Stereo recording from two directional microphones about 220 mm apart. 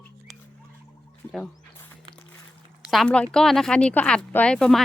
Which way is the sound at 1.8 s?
10° left (ahead or behind).